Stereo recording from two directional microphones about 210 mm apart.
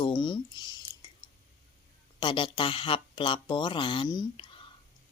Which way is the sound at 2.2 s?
25° left (ahead or behind).